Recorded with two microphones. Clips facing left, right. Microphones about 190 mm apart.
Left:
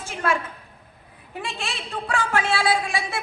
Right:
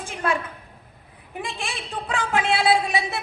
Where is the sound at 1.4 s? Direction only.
15° right (ahead or behind).